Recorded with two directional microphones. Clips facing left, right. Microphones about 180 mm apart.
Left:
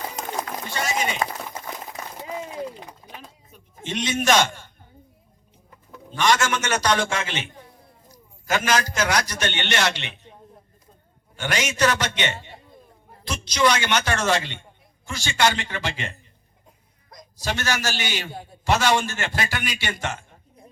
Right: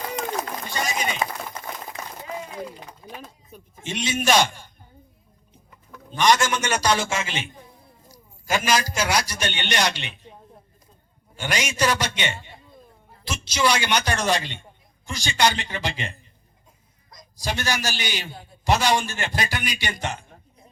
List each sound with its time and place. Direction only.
0.7 s a sound: 15° right (ahead or behind)
3.8 s a man's voice: 10° right (ahead or behind)
6.1 s a man's voice: 15° right (ahead or behind)
11.3 s a man's voice: 10° right (ahead or behind)
13.2 s a sound: 5° right (ahead or behind)
13.6 s a man's voice: 10° right (ahead or behind)
17.3 s a man's voice: 15° right (ahead or behind)